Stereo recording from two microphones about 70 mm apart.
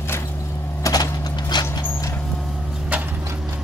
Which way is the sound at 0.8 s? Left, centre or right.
Left.